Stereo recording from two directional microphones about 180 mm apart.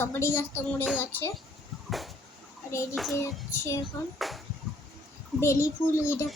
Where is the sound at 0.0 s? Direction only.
15° left (ahead or behind).